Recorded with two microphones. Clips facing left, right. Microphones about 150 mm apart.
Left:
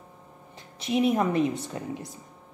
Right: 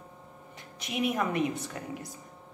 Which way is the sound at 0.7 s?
30° left (ahead or behind).